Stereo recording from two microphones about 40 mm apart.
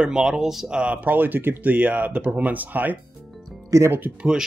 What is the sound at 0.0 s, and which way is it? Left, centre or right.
Speech, centre.